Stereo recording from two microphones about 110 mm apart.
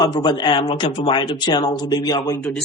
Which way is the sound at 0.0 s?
40° left (ahead or behind).